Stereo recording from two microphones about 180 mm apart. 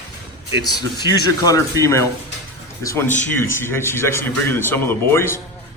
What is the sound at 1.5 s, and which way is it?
A man's voice, 20° left (ahead or behind).